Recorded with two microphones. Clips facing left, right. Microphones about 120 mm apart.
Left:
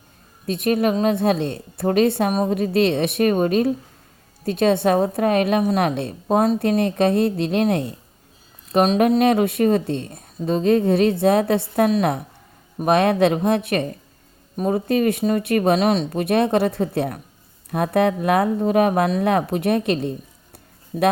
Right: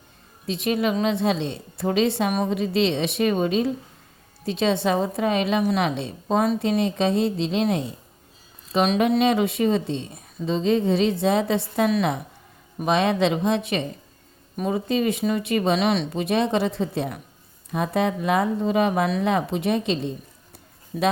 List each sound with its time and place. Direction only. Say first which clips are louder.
0.4 s a woman's voice: left 4 dB; 50° left (ahead or behind)
8.7 s a woman's voice: left 4 dB; 45° left (ahead or behind)
14.5 s a woman's voice: left 4 dB; 45° left (ahead or behind)
16.2 s speech: left 4 dB; 55° left (ahead or behind)
20.9 s speech: left 4 dB; 35° left (ahead or behind)